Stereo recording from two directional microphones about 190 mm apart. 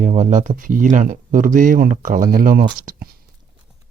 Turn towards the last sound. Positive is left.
turn(degrees=-50)  # may be behind; listen again after turning